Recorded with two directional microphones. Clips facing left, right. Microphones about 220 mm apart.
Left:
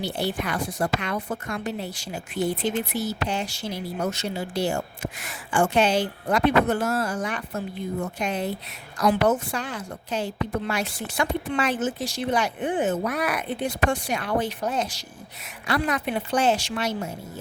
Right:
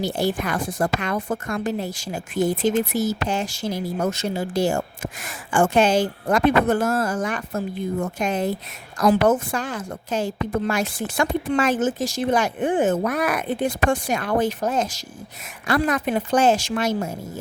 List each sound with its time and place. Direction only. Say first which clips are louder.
0.2 s a woman's voice: right 2 dB; 45° right (ahead or behind)